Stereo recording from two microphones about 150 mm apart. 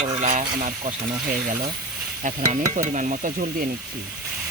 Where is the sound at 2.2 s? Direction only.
60° right (ahead or behind).